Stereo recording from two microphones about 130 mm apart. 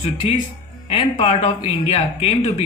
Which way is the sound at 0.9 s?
50° left (ahead or behind).